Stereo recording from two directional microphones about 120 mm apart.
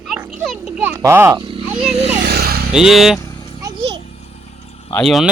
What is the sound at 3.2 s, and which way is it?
Vehicle, 30° left (ahead or behind).